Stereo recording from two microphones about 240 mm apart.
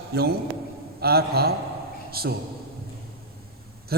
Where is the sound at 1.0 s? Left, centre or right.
Right.